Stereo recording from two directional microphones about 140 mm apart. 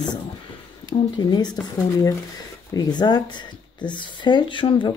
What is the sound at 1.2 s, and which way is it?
Speech, 30° left (ahead or behind).